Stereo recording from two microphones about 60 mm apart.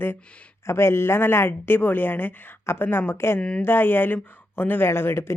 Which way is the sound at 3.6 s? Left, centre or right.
Left.